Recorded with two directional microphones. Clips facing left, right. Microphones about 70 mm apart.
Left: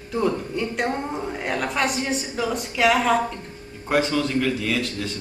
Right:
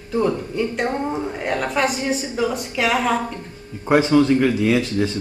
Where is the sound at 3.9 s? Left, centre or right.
Right.